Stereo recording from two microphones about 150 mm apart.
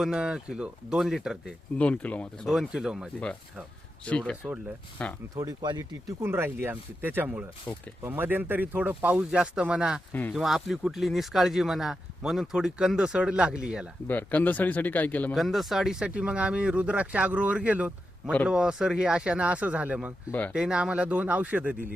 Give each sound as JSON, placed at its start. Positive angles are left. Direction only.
{"t": 0.0, "sound": "speech", "side_deg": -5}
{"t": 1.8, "sound": "speech", "side_deg": 10}
{"t": 2.5, "sound": "speech", "side_deg": -5}
{"t": 4.0, "sound": "speech", "side_deg": 10}
{"t": 5.3, "sound": "speech", "side_deg": -25}
{"t": 7.7, "sound": "speech", "side_deg": 15}
{"t": 8.0, "sound": "speech", "side_deg": -15}
{"t": 10.1, "sound": "speech", "side_deg": 10}
{"t": 10.3, "sound": "speech", "side_deg": 0}
{"t": 14.1, "sound": "speech", "side_deg": 10}
{"t": 15.4, "sound": "speech", "side_deg": 0}